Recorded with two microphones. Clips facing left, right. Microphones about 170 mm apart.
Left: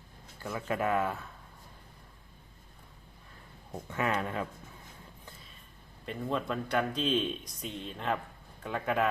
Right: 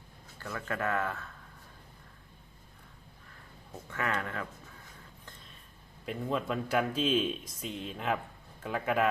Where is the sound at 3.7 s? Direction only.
20° left (ahead or behind).